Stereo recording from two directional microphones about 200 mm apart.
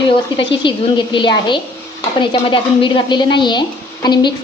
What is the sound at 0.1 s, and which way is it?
A woman's voice, 25° left (ahead or behind).